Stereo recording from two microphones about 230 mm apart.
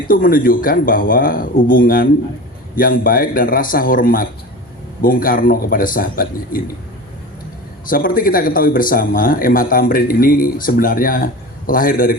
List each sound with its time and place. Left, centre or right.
0.1 s a man's voice: left
7.9 s a man's voice: left